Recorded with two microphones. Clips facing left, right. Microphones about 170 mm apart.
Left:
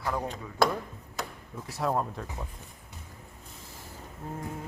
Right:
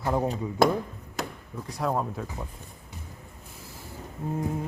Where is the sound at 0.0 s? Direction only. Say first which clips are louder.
Right 5 dB; 25° right (ahead or behind).